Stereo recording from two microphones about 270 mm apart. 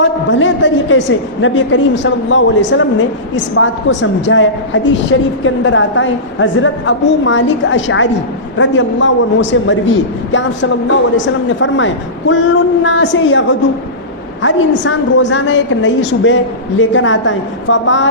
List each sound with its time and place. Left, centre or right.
0.0 s a woman's voice: left
11.4 s a woman's voice: left